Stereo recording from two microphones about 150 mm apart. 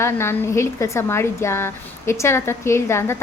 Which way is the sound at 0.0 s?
15° left (ahead or behind).